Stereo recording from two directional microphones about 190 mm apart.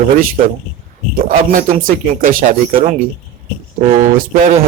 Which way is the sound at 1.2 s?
45° right (ahead or behind).